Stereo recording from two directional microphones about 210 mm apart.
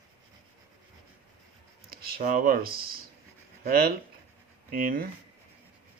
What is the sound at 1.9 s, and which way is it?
Speech, 40° right (ahead or behind).